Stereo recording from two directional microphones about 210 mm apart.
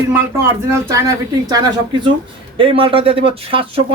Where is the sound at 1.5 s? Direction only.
20° right (ahead or behind).